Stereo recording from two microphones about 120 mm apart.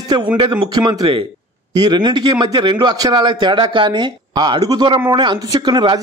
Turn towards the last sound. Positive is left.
turn(degrees=-40)  # may be behind; listen again after turning